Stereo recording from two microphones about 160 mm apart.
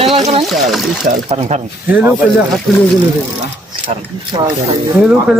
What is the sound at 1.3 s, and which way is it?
Speech, 40° right (ahead or behind).